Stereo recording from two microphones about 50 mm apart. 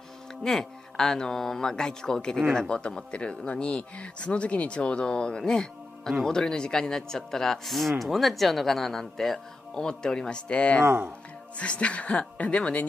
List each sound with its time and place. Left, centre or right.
0.4 s speech: centre